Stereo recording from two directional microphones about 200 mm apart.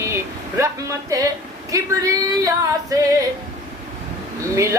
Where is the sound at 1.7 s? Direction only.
15° right (ahead or behind).